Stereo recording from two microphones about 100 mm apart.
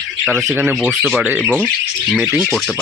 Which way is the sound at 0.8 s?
Centre (ahead or behind).